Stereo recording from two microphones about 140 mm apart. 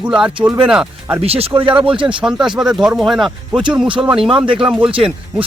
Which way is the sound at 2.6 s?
5° right (ahead or behind).